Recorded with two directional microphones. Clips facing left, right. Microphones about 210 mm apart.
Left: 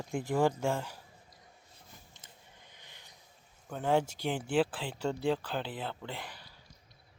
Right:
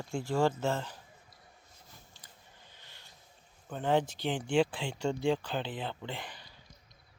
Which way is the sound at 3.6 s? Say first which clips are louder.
Even; 5° left (ahead or behind).